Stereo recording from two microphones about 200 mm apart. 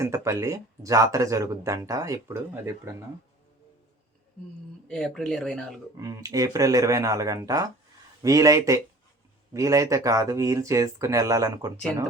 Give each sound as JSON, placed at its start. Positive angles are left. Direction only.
{"t": 0.0, "sound": "speech", "side_deg": -15}
{"t": 4.9, "sound": "speech", "side_deg": 5}
{"t": 6.0, "sound": "speech", "side_deg": -20}